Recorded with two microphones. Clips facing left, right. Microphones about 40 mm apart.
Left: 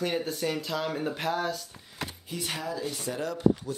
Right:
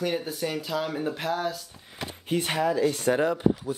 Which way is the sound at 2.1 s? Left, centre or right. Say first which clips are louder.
Right 11 dB; right.